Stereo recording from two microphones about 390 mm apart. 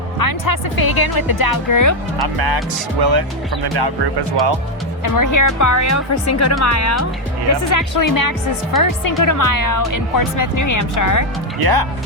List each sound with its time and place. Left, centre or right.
0.2 s speech: left
2.2 s speech: right
5.0 s speech: left
11.6 s speech: right